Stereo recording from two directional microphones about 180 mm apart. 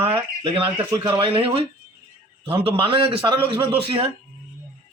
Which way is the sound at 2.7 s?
30° right (ahead or behind).